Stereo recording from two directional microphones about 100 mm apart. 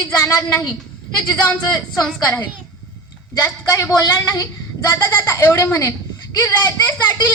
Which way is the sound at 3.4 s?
25° left (ahead or behind).